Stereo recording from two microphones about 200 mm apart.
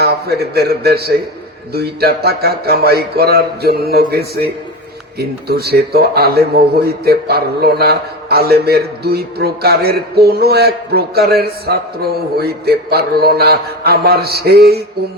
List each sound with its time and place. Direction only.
0.0 s a man's voice: 50° right (ahead or behind)